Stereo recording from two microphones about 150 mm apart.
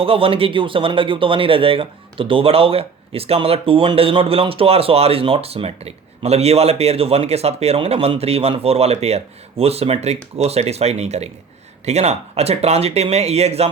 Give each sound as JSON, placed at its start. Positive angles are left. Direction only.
{"t": 0.0, "sound": "speech", "side_deg": -40}